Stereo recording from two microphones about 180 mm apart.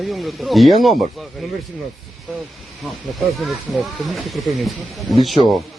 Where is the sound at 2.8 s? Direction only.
Centre (ahead or behind).